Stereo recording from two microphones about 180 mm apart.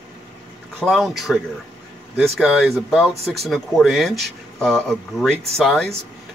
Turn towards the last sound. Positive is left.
turn(degrees=0)  # may be behind; listen again after turning